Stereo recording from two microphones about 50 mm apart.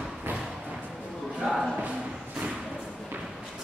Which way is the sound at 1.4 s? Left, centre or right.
Centre.